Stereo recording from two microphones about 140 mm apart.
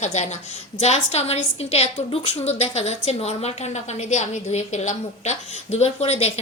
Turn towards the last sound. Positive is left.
turn(degrees=50)  # may be behind; listen again after turning